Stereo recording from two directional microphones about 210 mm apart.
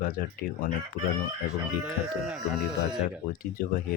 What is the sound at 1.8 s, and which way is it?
Speech, 5° right (ahead or behind).